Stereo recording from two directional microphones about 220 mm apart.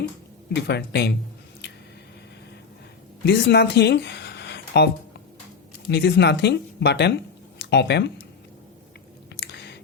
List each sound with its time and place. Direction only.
0.5 s speech: 50° left (ahead or behind)
3.2 s speech: 50° left (ahead or behind)
5.9 s speech: 50° left (ahead or behind)
9.4 s chewing: 50° left (ahead or behind)